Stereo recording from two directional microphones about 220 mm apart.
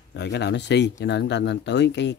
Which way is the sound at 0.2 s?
50° left (ahead or behind).